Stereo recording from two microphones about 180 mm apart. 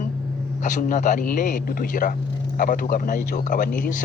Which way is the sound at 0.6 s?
45° left (ahead or behind).